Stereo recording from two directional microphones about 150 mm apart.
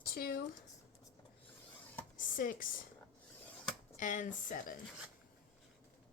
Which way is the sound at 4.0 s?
55° left (ahead or behind).